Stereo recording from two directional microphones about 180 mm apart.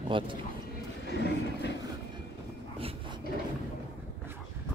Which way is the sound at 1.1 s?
70° left (ahead or behind).